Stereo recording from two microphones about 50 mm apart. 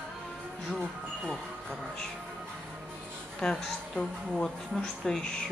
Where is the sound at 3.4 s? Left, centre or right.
Centre.